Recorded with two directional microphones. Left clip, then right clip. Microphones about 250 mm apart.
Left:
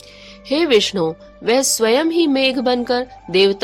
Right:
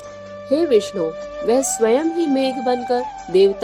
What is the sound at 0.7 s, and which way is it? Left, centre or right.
Speech, left.